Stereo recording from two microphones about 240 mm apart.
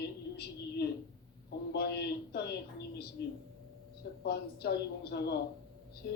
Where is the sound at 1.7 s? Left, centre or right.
Left.